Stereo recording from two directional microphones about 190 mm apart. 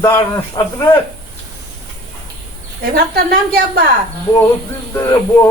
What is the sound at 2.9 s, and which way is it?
Speech, 55° right (ahead or behind).